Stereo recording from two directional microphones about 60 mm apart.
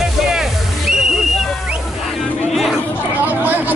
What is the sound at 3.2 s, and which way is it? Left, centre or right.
Chatter, right.